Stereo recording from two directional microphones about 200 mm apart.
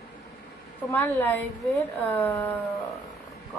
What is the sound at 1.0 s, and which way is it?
A woman's voice, 10° left (ahead or behind).